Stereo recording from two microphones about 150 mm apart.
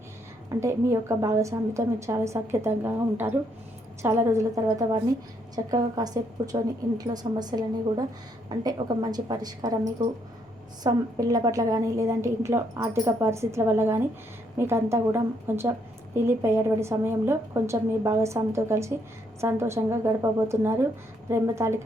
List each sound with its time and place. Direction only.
0.6 s a woman's voice: 20° right (ahead or behind)